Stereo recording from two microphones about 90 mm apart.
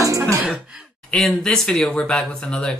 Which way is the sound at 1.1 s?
Centre (ahead or behind).